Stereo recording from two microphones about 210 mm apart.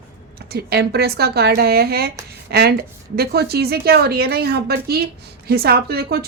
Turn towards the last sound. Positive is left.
turn(degrees=-50)  # may be behind; listen again after turning